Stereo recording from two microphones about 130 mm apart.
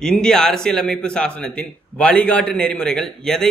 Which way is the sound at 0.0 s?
5° left (ahead or behind).